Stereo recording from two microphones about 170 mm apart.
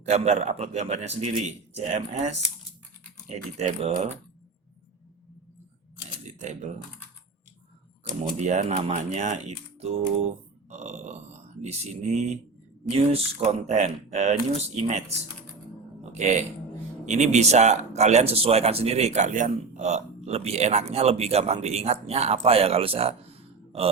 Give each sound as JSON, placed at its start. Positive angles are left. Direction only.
{"t": 0.0, "sound": "speech", "side_deg": -40}
{"t": 6.2, "sound": "typing", "side_deg": -45}
{"t": 8.2, "sound": "speech", "side_deg": -40}
{"t": 16.1, "sound": "speech", "side_deg": -45}